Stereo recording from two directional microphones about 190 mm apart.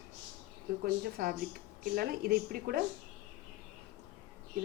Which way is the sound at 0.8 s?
50° right (ahead or behind).